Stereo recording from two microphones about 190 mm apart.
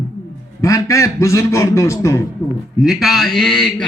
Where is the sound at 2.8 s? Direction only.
Centre (ahead or behind).